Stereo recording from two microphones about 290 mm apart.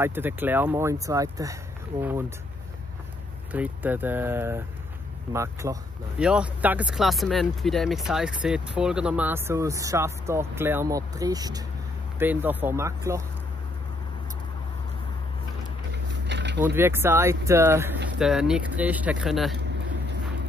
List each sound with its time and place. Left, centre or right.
0.0 s speech: centre
3.5 s speech: centre
15.9 s a sound: right
16.5 s speech: centre